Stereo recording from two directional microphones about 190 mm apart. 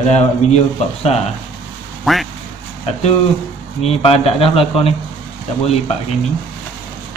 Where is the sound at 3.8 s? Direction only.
30° left (ahead or behind).